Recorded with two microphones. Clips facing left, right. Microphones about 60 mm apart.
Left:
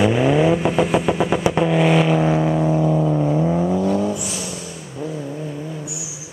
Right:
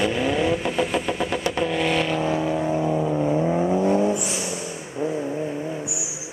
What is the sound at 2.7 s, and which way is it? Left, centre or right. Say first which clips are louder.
Vehicle: left 4 dB; centre.